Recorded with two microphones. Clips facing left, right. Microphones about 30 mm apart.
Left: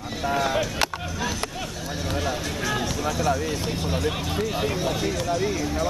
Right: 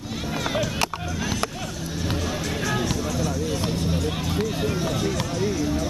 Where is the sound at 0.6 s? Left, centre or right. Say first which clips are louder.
Even; centre.